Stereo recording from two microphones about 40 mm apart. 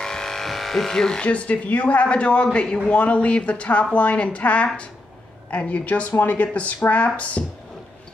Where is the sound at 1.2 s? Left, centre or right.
Left.